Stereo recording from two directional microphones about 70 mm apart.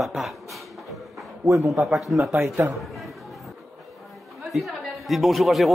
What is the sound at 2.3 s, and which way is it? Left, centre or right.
Speech, right.